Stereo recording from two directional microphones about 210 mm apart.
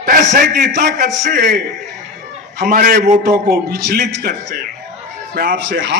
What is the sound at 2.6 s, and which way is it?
A man's voice, 45° right (ahead or behind).